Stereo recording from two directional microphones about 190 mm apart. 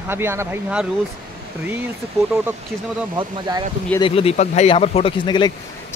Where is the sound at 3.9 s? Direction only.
30° left (ahead or behind).